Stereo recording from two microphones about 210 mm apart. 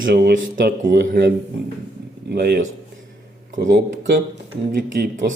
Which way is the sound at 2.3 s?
50° right (ahead or behind).